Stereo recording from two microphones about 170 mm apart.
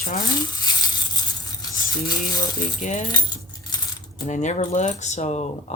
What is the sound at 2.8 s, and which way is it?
Speech, 45° left (ahead or behind).